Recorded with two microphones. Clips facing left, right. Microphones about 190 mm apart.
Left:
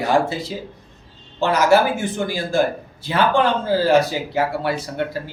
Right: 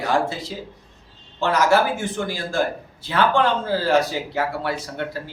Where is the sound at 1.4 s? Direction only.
15° left (ahead or behind).